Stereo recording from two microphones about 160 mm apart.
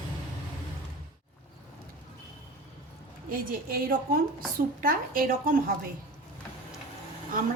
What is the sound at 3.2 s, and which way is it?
A woman's voice, 65° right (ahead or behind).